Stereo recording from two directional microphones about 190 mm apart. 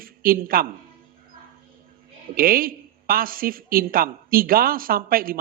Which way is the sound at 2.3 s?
50° right (ahead or behind).